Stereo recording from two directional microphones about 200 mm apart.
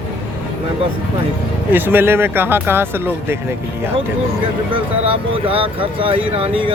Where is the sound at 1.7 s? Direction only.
10° right (ahead or behind).